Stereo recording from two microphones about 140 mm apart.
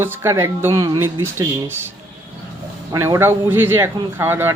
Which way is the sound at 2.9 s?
20° right (ahead or behind).